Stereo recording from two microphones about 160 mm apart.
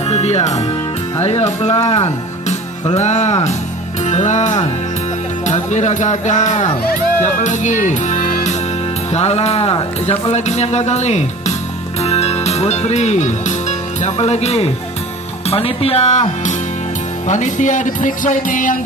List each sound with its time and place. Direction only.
0.1 s speech: 40° left (ahead or behind)
7.3 s music: 50° left (ahead or behind)
9.1 s speech: 40° left (ahead or behind)